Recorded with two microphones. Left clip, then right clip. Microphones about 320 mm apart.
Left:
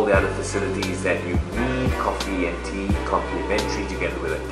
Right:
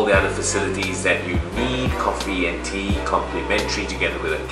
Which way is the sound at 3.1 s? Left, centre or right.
Centre.